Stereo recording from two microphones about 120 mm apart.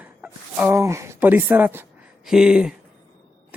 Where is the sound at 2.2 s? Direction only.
5° right (ahead or behind).